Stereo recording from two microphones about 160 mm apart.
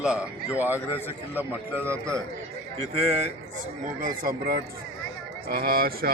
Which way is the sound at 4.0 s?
65° right (ahead or behind).